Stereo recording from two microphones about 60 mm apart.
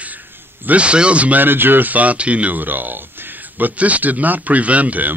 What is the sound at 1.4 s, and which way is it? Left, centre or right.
Speech, right.